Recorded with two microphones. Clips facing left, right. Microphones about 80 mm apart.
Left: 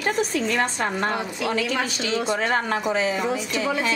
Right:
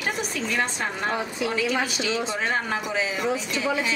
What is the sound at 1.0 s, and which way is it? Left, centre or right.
Speech, centre.